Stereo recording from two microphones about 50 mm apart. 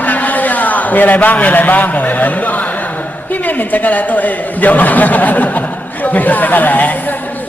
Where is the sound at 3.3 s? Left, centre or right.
Left.